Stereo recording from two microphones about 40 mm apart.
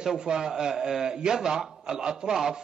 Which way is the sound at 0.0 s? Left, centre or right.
Centre.